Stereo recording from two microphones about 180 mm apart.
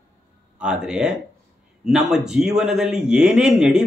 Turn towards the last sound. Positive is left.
turn(degrees=-5)  # may be behind; listen again after turning